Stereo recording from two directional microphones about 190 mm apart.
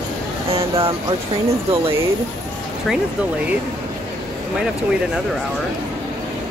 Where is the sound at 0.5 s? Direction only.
30° right (ahead or behind).